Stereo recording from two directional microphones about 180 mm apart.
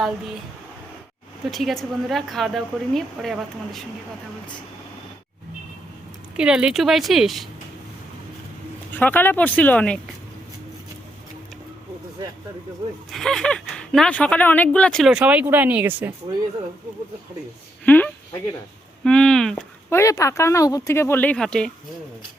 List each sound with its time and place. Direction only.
1.5 s speech: centre (ahead or behind)
6.3 s speech: 5° right (ahead or behind)
8.9 s speech: 10° left (ahead or behind)
13.1 s speech: centre (ahead or behind)
17.8 s speech: 10° left (ahead or behind)
19.9 s speech: 15° left (ahead or behind)